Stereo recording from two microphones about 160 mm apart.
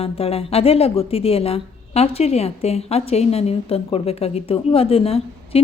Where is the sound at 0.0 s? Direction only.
40° left (ahead or behind).